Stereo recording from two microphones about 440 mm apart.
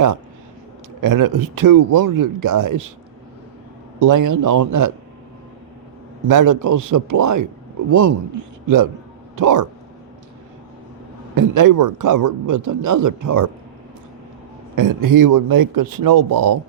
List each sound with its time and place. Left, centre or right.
1.0 s speech: right
4.0 s speech: right
6.2 s speech: right
9.3 s speech: right
11.3 s speech: right
14.8 s speech: right